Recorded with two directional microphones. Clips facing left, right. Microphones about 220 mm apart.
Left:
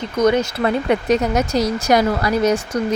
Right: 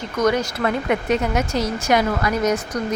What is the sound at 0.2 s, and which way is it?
Speech, 25° left (ahead or behind).